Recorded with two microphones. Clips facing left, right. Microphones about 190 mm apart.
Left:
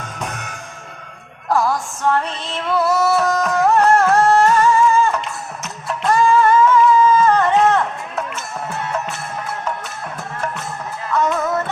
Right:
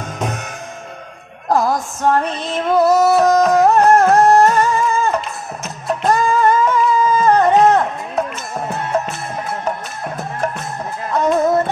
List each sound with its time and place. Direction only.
0.2 s music: 40° right (ahead or behind)
1.5 s music: 40° right (ahead or behind)
2.2 s music: 15° right (ahead or behind)
3.2 s music: 40° right (ahead or behind)
3.7 s music: 20° right (ahead or behind)
4.5 s music: 40° right (ahead or behind)